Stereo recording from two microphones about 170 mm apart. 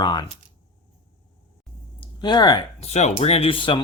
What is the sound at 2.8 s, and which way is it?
Speech, 40° left (ahead or behind).